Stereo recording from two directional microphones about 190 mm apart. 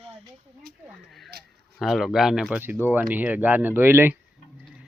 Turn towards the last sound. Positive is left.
turn(degrees=-10)  # may be behind; listen again after turning